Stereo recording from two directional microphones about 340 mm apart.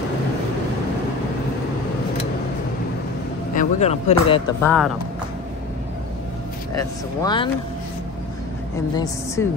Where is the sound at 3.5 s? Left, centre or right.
Centre.